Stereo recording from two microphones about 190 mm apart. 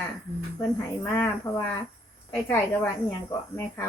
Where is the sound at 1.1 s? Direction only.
15° left (ahead or behind).